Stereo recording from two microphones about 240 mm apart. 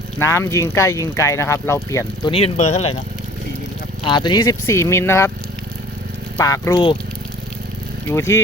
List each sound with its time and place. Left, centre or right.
0.2 s speech: centre
2.3 s speech: left
4.0 s speech: centre
6.3 s speech: centre
8.1 s speech: centre